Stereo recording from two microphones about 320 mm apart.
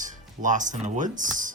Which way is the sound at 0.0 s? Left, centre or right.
Right.